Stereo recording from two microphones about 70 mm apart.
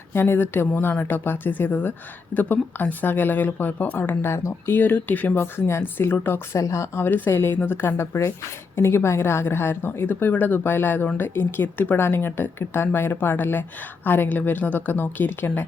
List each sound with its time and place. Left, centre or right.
0.1 s speech: left
6.5 s speech: left
7.0 s a woman's voice: left